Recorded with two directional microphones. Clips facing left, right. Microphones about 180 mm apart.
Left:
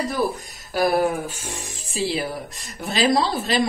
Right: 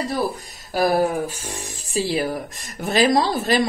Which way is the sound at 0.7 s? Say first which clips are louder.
Right 1 dB; 40° right (ahead or behind).